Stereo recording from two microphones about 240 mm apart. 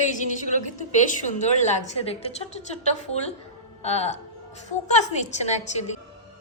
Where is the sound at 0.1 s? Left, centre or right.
Left.